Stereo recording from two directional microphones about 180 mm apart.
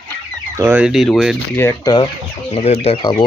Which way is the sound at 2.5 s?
35° left (ahead or behind).